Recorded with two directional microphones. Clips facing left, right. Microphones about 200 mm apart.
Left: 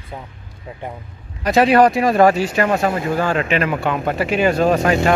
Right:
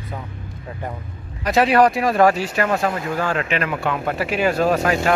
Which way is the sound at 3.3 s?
Centre (ahead or behind).